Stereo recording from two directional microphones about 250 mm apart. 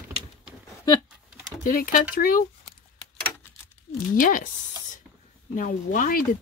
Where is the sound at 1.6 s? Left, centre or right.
Left.